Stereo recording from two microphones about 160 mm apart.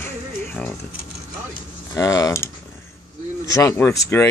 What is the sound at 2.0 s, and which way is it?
Speech, 20° left (ahead or behind).